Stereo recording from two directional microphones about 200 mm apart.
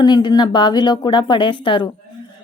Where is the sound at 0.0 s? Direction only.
20° left (ahead or behind).